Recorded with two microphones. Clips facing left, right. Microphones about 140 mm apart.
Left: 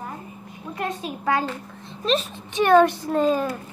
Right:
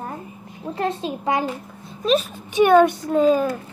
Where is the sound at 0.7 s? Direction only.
25° right (ahead or behind).